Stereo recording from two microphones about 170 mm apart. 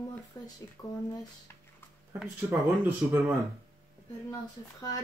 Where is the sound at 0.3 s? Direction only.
25° left (ahead or behind).